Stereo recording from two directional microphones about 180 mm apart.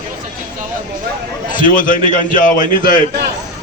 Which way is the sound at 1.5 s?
50° left (ahead or behind).